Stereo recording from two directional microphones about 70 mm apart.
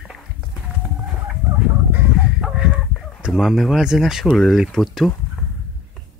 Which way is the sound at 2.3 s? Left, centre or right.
Centre.